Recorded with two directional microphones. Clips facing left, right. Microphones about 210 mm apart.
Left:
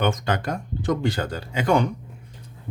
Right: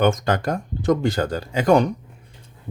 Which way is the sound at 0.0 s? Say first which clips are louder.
Right 4 dB; 45° right (ahead or behind).